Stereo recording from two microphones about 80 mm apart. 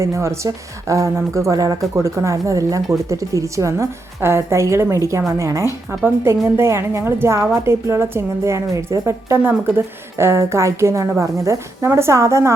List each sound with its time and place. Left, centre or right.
0.0 s a woman's voice: right